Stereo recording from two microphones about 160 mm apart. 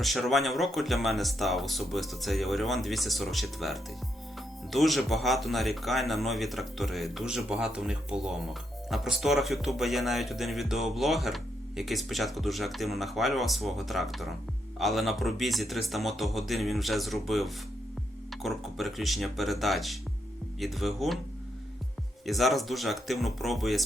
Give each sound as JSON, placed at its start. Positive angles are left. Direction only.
{"t": 0.0, "sound": "speech", "side_deg": 0}
{"t": 22.3, "sound": "speech", "side_deg": 0}